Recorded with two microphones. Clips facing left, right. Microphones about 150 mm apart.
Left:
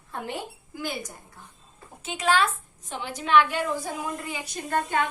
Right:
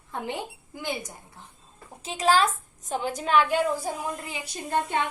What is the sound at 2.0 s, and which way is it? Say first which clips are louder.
A woman's voice: right 2 dB; 35° right (ahead or behind).